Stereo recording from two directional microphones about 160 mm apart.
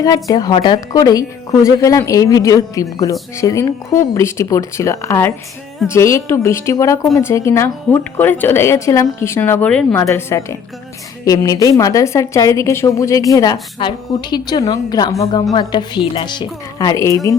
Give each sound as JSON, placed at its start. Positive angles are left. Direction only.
{"t": 0.0, "sound": "speech", "side_deg": 25}